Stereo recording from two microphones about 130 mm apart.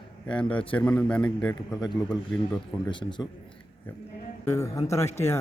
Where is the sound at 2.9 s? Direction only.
35° left (ahead or behind).